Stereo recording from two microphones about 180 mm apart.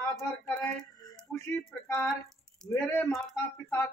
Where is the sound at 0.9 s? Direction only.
20° left (ahead or behind).